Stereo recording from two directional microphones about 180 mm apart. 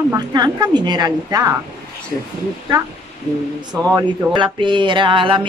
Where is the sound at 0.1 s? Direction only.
20° right (ahead or behind).